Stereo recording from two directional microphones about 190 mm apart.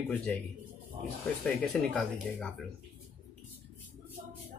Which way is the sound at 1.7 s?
5° left (ahead or behind).